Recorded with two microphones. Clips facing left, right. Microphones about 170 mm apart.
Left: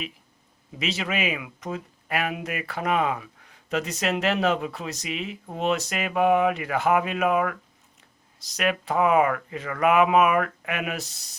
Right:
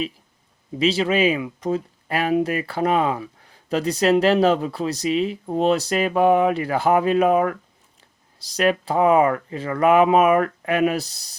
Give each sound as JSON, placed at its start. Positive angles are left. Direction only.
{"t": 0.8, "sound": "speech", "side_deg": -30}